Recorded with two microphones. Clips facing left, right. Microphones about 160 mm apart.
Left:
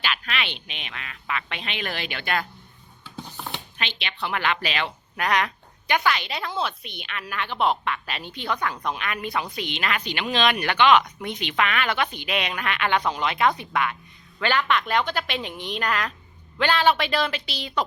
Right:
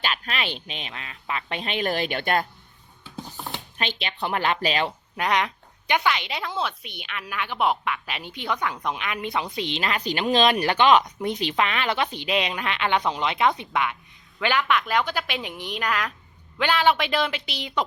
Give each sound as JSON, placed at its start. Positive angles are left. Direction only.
{"t": 0.0, "sound": "speech", "side_deg": -40}
{"t": 3.8, "sound": "speech", "side_deg": -40}
{"t": 5.1, "sound": "a woman's voice", "side_deg": -25}